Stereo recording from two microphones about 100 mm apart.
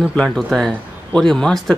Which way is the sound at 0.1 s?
5° left (ahead or behind).